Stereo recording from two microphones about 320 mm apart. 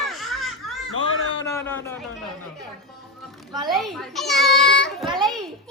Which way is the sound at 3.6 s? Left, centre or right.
Centre.